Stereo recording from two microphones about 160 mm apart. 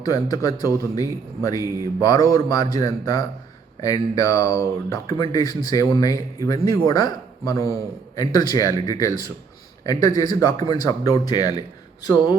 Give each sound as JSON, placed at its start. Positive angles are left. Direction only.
{"t": 0.0, "sound": "speech", "side_deg": 25}